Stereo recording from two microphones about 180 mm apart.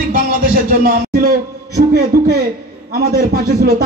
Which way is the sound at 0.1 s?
50° right (ahead or behind).